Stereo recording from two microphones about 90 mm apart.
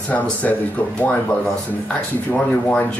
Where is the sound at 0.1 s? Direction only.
15° left (ahead or behind).